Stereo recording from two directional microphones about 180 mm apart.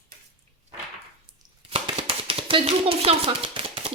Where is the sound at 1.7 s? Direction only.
30° right (ahead or behind).